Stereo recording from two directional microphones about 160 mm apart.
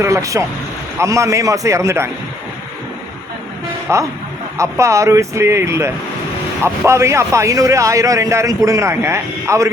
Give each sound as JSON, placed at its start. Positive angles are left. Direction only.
{"t": 0.0, "sound": "speech", "side_deg": -20}
{"t": 3.9, "sound": "speech", "side_deg": -15}